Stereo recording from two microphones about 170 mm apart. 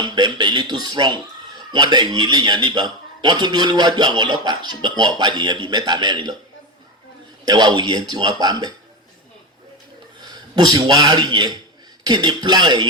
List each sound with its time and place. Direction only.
0.0 s a man's voice: 25° right (ahead or behind)
7.4 s a man's voice: 25° right (ahead or behind)
10.2 s a man's voice: 25° right (ahead or behind)